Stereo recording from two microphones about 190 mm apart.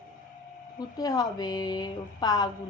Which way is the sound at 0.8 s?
20° left (ahead or behind).